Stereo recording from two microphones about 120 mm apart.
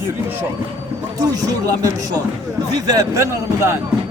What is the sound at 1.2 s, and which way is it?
A man's voice, 30° right (ahead or behind).